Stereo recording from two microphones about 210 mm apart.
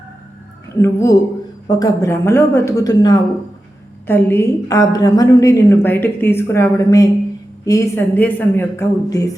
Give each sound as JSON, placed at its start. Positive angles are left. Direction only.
{"t": 0.8, "sound": "a woman's voice", "side_deg": 15}